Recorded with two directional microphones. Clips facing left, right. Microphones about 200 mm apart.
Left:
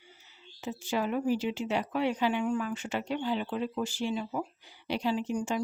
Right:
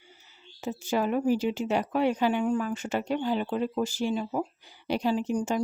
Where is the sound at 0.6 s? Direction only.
45° right (ahead or behind).